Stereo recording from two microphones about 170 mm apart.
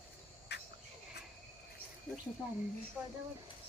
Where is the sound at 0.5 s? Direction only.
80° left.